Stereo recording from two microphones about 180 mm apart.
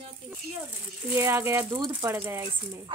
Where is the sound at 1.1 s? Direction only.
15° right (ahead or behind).